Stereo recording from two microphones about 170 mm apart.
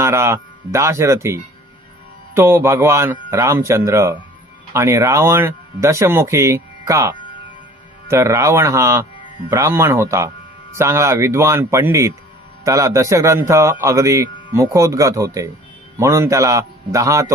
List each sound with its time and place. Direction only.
0.0 s a man's voice: 15° right (ahead or behind)
8.1 s a man's voice: 15° right (ahead or behind)